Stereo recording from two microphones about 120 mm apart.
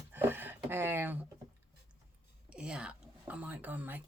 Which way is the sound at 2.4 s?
10° right (ahead or behind).